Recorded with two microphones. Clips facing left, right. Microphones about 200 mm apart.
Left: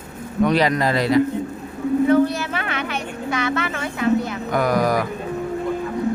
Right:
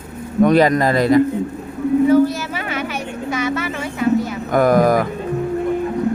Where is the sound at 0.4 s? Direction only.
50° right (ahead or behind).